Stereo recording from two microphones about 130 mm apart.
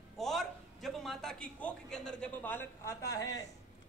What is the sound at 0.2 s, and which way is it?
A man's voice, centre (ahead or behind).